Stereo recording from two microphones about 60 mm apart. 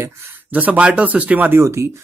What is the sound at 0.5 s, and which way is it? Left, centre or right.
Speech, right.